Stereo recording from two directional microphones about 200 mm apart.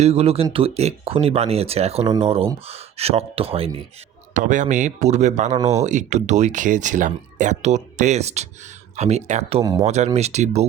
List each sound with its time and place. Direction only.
0.0 s speech: 30° right (ahead or behind)